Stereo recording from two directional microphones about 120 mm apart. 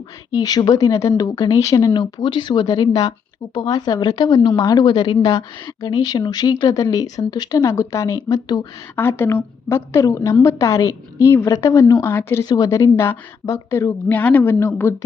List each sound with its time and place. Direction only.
0.3 s speech: 30° left (ahead or behind)
5.6 s speech: 30° left (ahead or behind)
9.0 s a woman's voice: 20° left (ahead or behind)
12.5 s a woman's voice: 30° left (ahead or behind)